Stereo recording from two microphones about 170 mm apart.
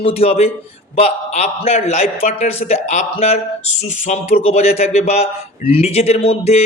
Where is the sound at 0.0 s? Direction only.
35° left (ahead or behind).